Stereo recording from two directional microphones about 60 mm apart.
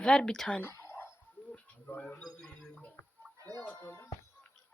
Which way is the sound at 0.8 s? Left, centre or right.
Left.